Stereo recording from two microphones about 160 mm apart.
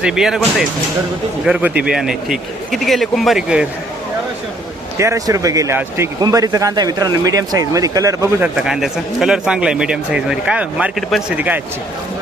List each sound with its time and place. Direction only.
0.0 s speech: 5° right (ahead or behind)
1.5 s speech: 5° right (ahead or behind)
4.9 s speech: 20° right (ahead or behind)
8.5 s speech: 5° right (ahead or behind)